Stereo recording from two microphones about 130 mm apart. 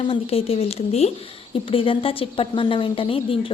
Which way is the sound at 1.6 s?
45° left (ahead or behind).